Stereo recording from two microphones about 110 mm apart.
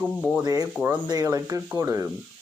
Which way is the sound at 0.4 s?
35° right (ahead or behind).